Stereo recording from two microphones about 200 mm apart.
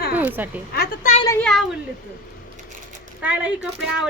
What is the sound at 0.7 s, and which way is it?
Speech, 45° left (ahead or behind).